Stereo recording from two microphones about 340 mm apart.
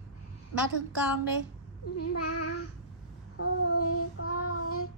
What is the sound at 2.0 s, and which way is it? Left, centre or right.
Child singing, left.